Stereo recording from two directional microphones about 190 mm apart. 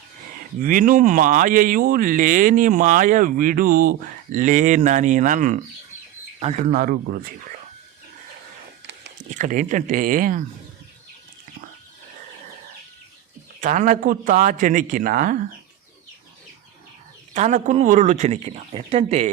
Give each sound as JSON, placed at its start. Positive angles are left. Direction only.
{"t": 0.6, "sound": "speech", "side_deg": -45}
{"t": 9.1, "sound": "speech", "side_deg": -40}
{"t": 13.6, "sound": "speech", "side_deg": -40}
{"t": 17.3, "sound": "speech", "side_deg": -40}